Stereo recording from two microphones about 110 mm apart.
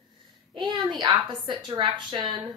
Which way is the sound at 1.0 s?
45° right (ahead or behind).